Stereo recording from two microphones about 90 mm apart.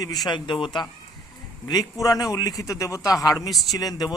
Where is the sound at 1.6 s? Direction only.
45° left (ahead or behind).